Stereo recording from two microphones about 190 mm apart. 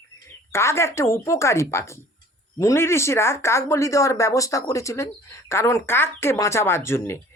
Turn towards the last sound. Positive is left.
turn(degrees=15)  # may be behind; listen again after turning